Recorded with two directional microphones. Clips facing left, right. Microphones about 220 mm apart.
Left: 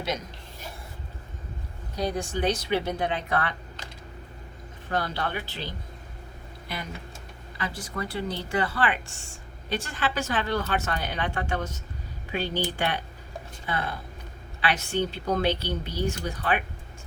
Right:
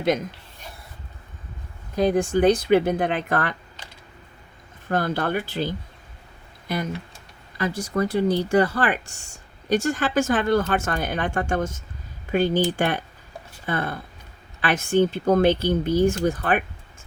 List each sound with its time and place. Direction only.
2.0 s speech: 55° right (ahead or behind)
4.9 s speech: 50° right (ahead or behind)
7.6 s speech: 45° right (ahead or behind)